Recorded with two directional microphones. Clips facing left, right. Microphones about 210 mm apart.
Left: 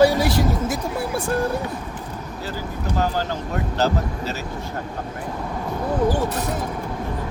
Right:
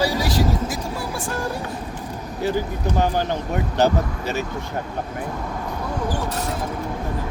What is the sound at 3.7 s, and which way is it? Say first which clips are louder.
Speech: right 3 dB; 15° right (ahead or behind).